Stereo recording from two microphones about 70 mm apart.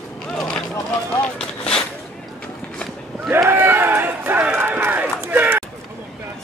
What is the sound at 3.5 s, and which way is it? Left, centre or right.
Run, right.